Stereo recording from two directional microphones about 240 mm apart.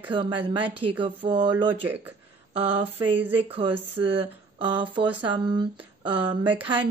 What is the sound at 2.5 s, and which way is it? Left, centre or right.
Speech, right.